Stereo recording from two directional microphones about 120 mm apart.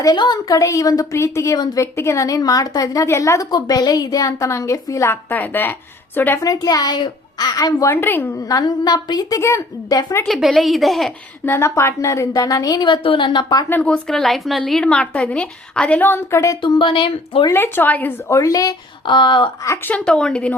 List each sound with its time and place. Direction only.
0.0 s a woman's voice: 35° left (ahead or behind); by 6.4 s 15° left (ahead or behind)
6.4 s a woman's voice: 30° left (ahead or behind)
8.4 s a woman's voice: 30° left (ahead or behind)
10.2 s a woman's voice: centre (ahead or behind)
11.4 s a woman's voice: 20° left (ahead or behind)
13.0 s speech: 45° left (ahead or behind)
13.7 s a woman's voice: 10° left (ahead or behind)
16.6 s speech: 45° left (ahead or behind)
17.5 s a woman's voice: 20° left (ahead or behind); by 19.5 s 40° left (ahead or behind)
19.6 s a woman's voice: 25° left (ahead or behind)
19.9 s a woman's voice: 5° left (ahead or behind)